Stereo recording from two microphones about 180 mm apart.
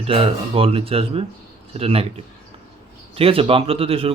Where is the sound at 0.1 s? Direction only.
30° right (ahead or behind).